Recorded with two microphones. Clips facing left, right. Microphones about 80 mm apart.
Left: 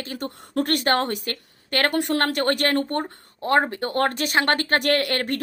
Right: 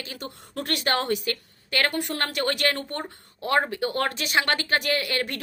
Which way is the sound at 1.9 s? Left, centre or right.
Left.